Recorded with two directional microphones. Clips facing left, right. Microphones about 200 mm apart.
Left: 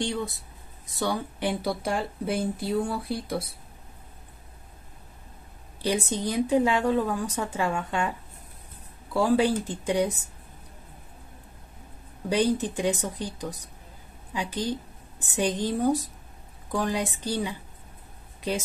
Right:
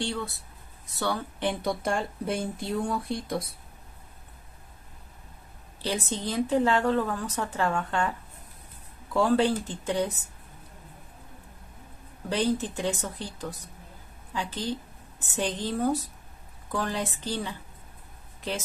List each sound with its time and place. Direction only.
0.0 s speech: 15° left (ahead or behind)
5.8 s speech: 15° left (ahead or behind)
12.3 s a woman's voice: 15° left (ahead or behind)